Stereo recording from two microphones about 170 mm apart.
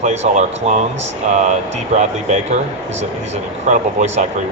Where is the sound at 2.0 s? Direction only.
45° right (ahead or behind).